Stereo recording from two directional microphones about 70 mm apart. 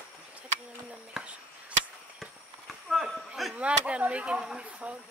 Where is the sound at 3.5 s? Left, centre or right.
Centre.